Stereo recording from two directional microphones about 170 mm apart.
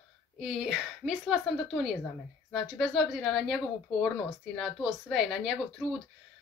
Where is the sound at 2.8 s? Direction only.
Centre (ahead or behind).